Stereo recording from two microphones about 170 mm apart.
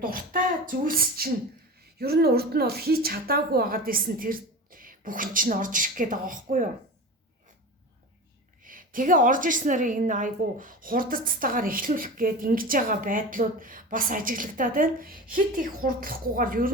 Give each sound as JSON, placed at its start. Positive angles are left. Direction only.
{"t": 0.0, "sound": "a woman's voice", "side_deg": -55}
{"t": 8.6, "sound": "a woman's voice", "side_deg": -55}